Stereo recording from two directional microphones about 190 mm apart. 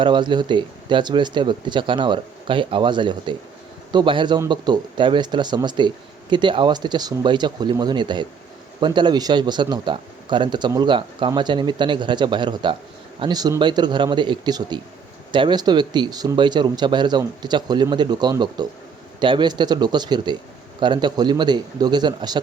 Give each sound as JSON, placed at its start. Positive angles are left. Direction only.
{"t": 0.0, "sound": "speech", "side_deg": -25}